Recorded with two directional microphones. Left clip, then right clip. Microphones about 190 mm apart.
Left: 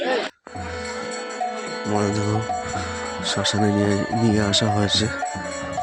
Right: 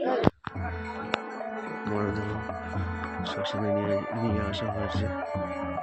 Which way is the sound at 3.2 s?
50° left (ahead or behind).